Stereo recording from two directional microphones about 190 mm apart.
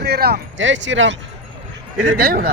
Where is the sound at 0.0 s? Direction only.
55° right (ahead or behind); by 1.1 s 80° right.